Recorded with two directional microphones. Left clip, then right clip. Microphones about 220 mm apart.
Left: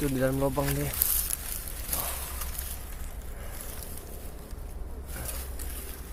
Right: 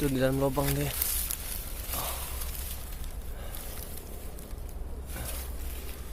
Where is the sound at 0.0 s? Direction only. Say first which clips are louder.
Even; centre (ahead or behind).